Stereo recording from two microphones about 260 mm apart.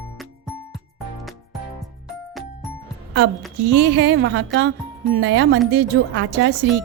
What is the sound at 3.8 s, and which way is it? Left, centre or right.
A woman's voice, right.